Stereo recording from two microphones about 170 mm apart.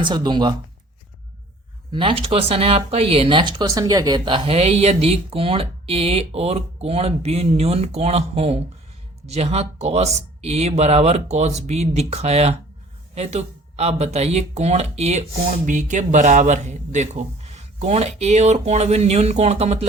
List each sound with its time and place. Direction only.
0.0 s speech: 25° right (ahead or behind)
1.9 s speech: 30° right (ahead or behind)